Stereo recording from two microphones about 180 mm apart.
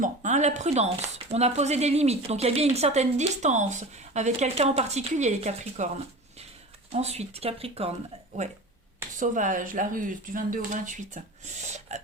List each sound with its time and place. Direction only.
0.0 s speech: 40° right (ahead or behind)
6.9 s speech: 35° right (ahead or behind)